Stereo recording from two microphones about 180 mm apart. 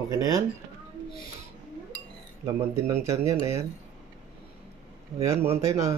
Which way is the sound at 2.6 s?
15° right (ahead or behind).